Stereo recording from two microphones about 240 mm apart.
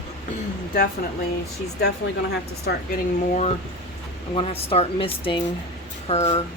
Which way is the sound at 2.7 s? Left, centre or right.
Left.